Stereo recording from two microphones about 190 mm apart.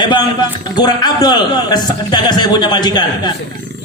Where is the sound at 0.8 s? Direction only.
20° left (ahead or behind).